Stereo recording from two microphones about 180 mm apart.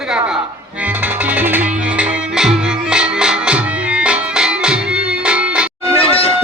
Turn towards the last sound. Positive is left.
turn(degrees=30)  # may be behind; listen again after turning